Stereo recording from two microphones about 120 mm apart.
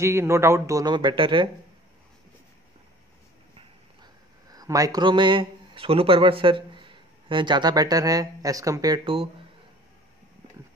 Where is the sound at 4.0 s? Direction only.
30° right (ahead or behind).